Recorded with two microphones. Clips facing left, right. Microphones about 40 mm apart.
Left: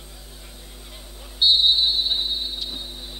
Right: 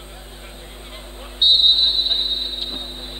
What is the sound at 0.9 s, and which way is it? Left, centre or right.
Vehicle, right.